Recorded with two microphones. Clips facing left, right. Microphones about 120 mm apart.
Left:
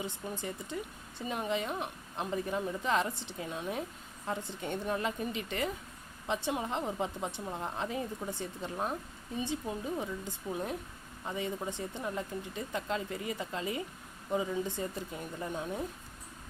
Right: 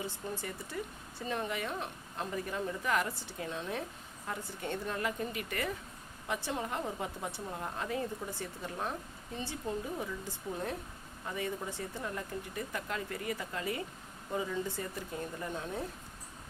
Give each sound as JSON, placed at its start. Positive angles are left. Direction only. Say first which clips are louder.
{"t": 0.0, "sound": "speech", "louder": "left 1 dB", "side_deg": 20}